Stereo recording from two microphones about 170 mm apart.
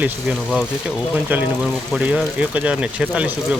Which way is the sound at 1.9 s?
5° right (ahead or behind).